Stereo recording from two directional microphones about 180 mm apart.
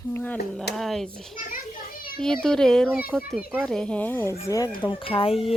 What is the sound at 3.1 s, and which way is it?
Speech, 10° right (ahead or behind).